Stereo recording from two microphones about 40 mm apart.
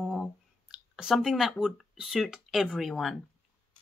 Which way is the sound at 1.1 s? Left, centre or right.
Centre.